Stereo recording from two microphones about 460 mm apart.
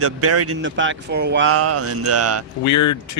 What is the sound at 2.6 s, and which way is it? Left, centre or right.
Speech, left.